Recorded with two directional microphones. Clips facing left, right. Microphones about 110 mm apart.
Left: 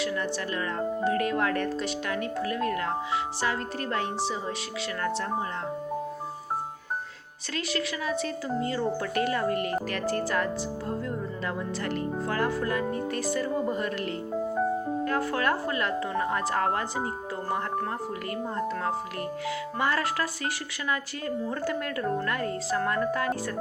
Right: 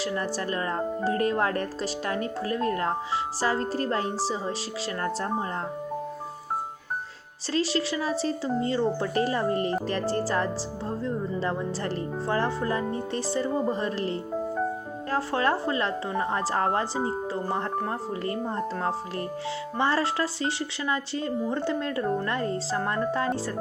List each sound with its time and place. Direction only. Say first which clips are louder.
0.0 s speech: right 1 dB; 35° right (ahead or behind)
7.5 s speech: right 5 dB; 30° right (ahead or behind)
15.1 s speech: right 4 dB; 30° right (ahead or behind)
19.8 s speech: right 3 dB; 30° right (ahead or behind)